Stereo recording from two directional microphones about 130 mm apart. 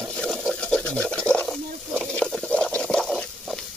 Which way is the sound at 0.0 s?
Centre (ahead or behind).